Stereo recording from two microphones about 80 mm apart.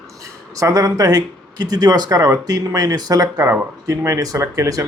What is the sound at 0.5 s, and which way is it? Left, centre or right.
Speech, right.